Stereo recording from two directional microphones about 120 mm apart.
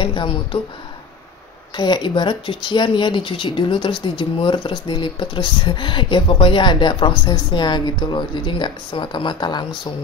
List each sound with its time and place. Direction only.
0.0 s speech: 45° left (ahead or behind)
1.8 s speech: 40° left (ahead or behind)